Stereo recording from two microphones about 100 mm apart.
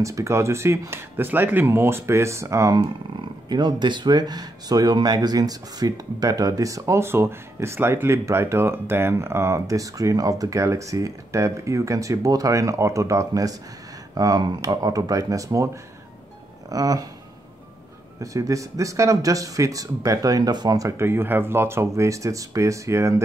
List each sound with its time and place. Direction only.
0.0 s speech: 30° right (ahead or behind)
2.8 s speech: 45° right (ahead or behind)
18.2 s speech: 35° right (ahead or behind)